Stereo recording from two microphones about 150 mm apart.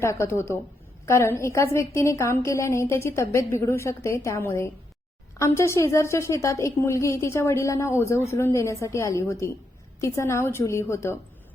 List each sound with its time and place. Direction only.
0.0 s a woman's voice: 20° left (ahead or behind)